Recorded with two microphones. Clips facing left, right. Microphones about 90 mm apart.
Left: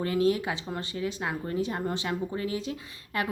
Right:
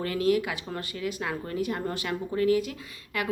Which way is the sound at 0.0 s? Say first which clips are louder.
Even; 25° left (ahead or behind).